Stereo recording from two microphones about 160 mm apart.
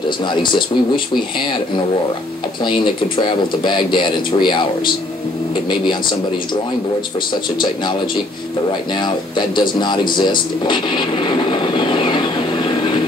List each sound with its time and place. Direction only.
0.2 s speech: 30° left (ahead or behind)
2.6 s speech: 30° left (ahead or behind)
9.6 s a sound: 30° left (ahead or behind)